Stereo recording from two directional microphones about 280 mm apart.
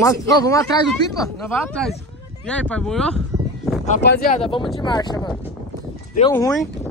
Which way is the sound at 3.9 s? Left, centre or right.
Left.